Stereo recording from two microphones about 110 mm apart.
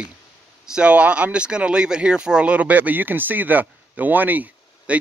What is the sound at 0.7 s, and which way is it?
Speech, 10° right (ahead or behind).